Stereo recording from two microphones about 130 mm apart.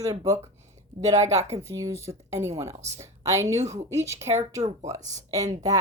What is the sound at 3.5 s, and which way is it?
Speech, 60° right (ahead or behind).